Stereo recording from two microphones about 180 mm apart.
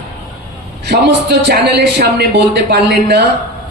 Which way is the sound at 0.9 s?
65° right (ahead or behind).